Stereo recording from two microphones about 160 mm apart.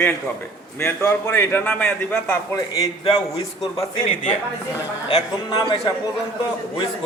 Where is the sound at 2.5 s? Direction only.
25° left (ahead or behind).